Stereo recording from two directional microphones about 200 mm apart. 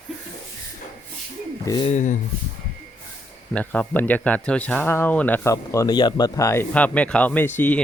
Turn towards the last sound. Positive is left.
turn(degrees=10)  # may be behind; listen again after turning